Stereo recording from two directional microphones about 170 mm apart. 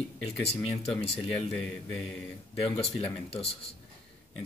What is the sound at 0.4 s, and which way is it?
Speech, 35° left (ahead or behind).